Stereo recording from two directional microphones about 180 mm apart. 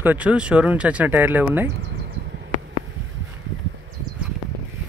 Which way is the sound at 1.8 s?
65° right (ahead or behind).